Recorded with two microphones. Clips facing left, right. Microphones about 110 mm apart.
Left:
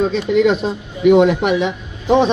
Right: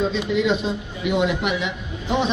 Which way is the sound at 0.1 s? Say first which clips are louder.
Left 6 dB; 50° left (ahead or behind).